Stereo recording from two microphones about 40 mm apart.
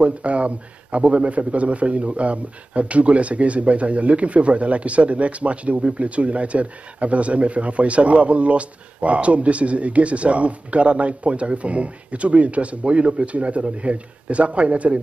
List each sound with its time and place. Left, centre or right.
0.0 s a man's voice: right